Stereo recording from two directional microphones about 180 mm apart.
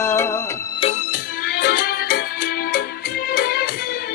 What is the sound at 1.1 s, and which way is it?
Music, 55° left (ahead or behind).